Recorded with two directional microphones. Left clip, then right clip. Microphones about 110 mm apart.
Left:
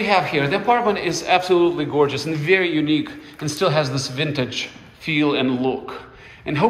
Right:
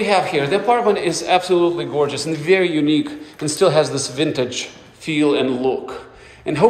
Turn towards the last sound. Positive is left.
turn(degrees=-45)  # may be behind; listen again after turning